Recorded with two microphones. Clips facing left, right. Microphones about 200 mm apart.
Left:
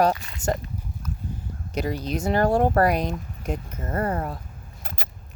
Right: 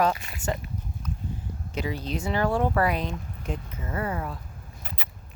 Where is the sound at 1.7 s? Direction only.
40° left (ahead or behind).